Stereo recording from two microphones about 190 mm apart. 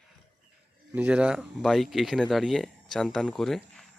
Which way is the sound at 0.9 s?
10° right (ahead or behind).